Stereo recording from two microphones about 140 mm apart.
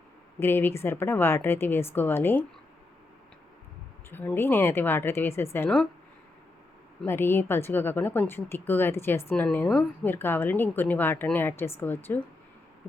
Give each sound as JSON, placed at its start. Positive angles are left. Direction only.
{"t": 0.3, "sound": "a woman's voice", "side_deg": 15}
{"t": 4.1, "sound": "a woman's voice", "side_deg": 15}
{"t": 7.0, "sound": "a woman's voice", "side_deg": 15}